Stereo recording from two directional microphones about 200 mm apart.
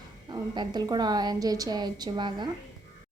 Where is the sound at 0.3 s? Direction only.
20° right (ahead or behind).